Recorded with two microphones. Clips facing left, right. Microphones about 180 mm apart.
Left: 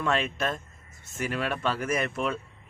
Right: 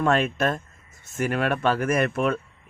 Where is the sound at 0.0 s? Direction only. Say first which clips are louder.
Right 6 dB; 50° right (ahead or behind).